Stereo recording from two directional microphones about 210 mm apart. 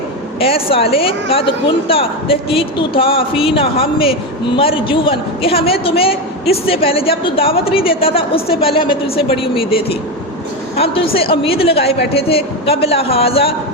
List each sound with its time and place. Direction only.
0.3 s speech: 25° left (ahead or behind)